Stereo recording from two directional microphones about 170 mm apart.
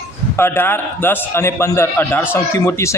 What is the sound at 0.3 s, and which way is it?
A man's voice, 15° left (ahead or behind).